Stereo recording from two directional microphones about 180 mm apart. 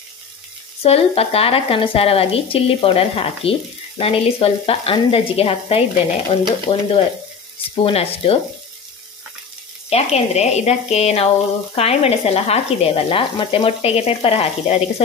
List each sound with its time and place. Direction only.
0.8 s speech: 35° left (ahead or behind)
9.8 s speech: 35° left (ahead or behind)